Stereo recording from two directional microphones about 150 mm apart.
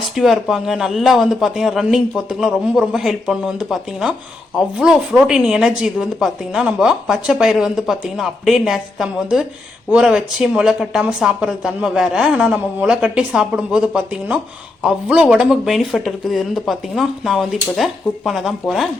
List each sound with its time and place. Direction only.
0.2 s speech: 5° right (ahead or behind)